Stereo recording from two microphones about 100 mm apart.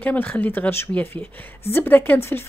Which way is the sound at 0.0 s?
15° left (ahead or behind).